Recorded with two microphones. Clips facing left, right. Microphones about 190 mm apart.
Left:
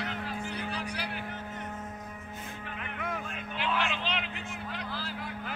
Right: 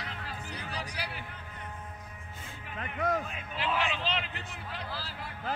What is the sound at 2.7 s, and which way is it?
Music, 40° right (ahead or behind).